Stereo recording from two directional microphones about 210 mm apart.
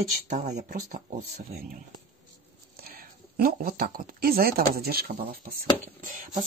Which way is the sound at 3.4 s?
40° right (ahead or behind).